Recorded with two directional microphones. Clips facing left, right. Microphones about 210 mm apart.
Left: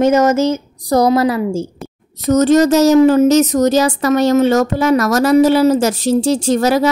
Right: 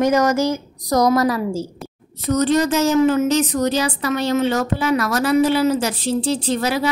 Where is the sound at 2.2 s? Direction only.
45° left (ahead or behind).